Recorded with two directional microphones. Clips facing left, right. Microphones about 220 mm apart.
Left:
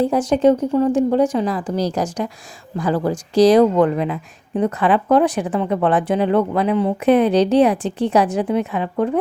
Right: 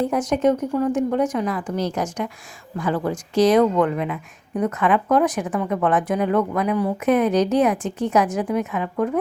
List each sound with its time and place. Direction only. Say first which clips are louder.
0.0 s speech: left 4 dB; 30° left (ahead or behind)